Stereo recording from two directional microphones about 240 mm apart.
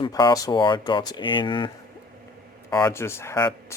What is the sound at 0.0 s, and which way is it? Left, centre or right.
Speech, centre.